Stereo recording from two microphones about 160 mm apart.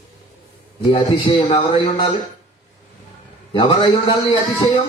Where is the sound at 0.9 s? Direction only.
30° left (ahead or behind).